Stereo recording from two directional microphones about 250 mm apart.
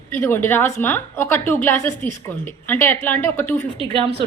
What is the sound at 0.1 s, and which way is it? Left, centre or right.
A woman's voice, centre.